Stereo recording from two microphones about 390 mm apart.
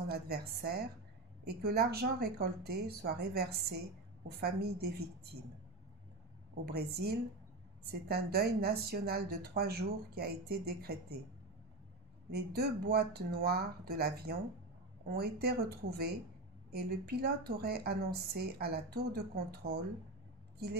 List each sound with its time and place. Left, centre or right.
0.1 s a woman's voice: right
6.6 s a woman's voice: right
12.3 s a woman's voice: right